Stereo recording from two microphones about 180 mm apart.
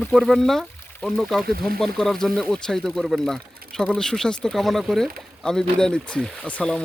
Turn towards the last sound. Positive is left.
turn(degrees=5)  # may be behind; listen again after turning